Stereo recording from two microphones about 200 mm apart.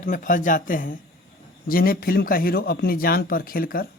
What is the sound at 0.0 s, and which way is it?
A man's voice, 40° left (ahead or behind).